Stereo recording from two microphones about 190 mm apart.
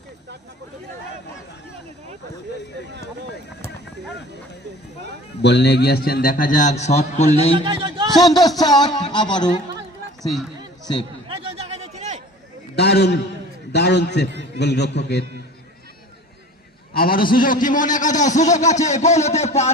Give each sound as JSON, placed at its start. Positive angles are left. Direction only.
{"t": 5.4, "sound": "a man's voice", "side_deg": 60}
{"t": 7.5, "sound": "a man's voice", "side_deg": -25}
{"t": 8.2, "sound": "speech", "side_deg": 20}
{"t": 11.3, "sound": "a sound", "side_deg": -30}
{"t": 12.7, "sound": "a man's voice", "side_deg": 60}
{"t": 16.9, "sound": "a man's voice", "side_deg": 50}